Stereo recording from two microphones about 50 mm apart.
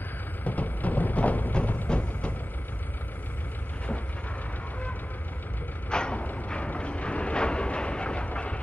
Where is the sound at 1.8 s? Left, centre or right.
Left.